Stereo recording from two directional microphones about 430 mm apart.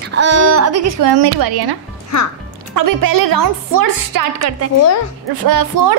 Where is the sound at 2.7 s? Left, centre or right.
Right.